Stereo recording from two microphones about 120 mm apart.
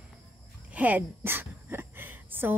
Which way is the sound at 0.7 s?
15° right (ahead or behind).